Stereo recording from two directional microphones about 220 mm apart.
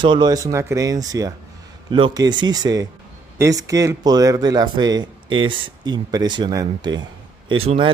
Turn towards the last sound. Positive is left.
turn(degrees=-25)  # may be behind; listen again after turning